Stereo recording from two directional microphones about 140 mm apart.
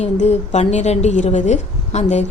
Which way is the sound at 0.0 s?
50° left (ahead or behind).